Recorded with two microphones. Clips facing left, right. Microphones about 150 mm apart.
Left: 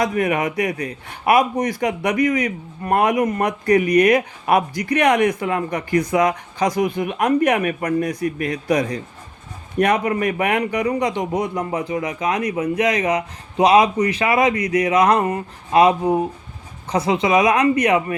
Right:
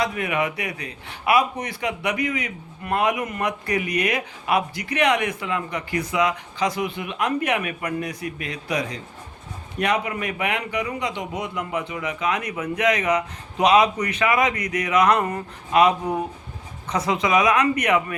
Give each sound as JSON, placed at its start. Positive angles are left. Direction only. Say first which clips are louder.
{"t": 0.0, "sound": "a man's voice", "louder": "left 4 dB", "side_deg": 40}